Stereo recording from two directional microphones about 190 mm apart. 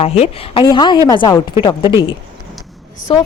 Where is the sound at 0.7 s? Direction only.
25° left (ahead or behind).